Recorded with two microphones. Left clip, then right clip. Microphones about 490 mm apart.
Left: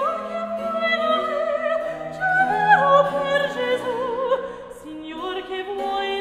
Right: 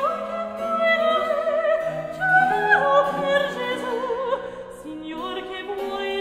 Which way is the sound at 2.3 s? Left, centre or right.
Left.